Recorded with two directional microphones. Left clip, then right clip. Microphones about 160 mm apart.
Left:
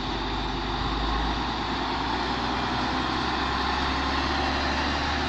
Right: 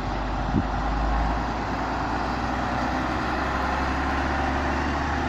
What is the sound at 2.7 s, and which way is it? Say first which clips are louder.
Vehicle: right 1 dB; 20° right (ahead or behind).